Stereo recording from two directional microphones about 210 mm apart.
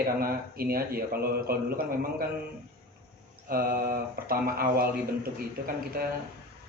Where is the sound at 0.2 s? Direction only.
45° right (ahead or behind).